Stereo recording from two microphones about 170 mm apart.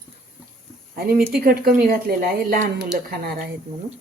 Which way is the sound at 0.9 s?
60° right (ahead or behind).